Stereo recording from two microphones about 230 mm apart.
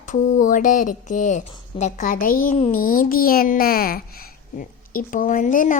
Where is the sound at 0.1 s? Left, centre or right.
Left.